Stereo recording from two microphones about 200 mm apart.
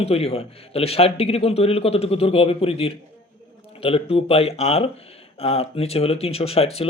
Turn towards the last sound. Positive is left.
turn(degrees=30)  # may be behind; listen again after turning